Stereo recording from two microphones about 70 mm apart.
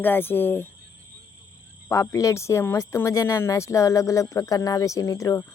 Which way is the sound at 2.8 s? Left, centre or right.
Left.